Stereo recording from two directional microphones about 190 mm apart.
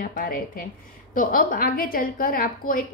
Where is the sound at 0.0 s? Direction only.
50° left (ahead or behind).